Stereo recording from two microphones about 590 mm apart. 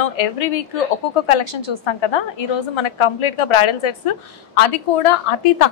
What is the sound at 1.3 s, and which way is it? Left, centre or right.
A woman's voice, left.